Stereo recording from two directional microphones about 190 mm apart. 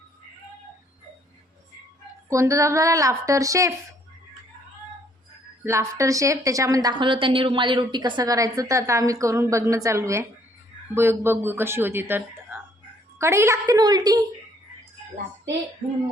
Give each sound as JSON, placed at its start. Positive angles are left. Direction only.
{"t": 2.3, "sound": "a woman's voice", "side_deg": -15}
{"t": 5.6, "sound": "a woman's voice", "side_deg": -15}